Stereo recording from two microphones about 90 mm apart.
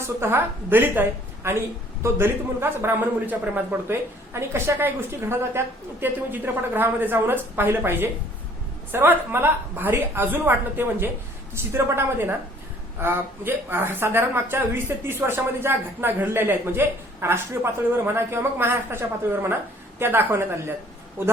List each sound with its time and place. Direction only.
0.0 s a woman's voice: 25° right (ahead or behind)